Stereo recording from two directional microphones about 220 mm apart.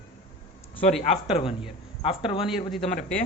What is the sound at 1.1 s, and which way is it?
Speech, 25° left (ahead or behind).